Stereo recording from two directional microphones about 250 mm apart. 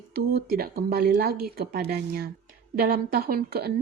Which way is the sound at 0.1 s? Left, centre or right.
Right.